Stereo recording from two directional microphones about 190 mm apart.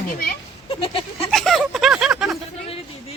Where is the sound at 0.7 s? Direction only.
30° left (ahead or behind).